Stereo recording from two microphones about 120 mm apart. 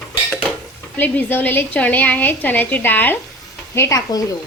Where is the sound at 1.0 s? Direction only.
15° left (ahead or behind).